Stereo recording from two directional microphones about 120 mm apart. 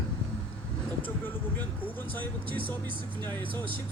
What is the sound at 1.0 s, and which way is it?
Speech, 15° left (ahead or behind).